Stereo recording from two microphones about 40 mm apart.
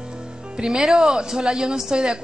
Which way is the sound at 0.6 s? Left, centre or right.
Centre.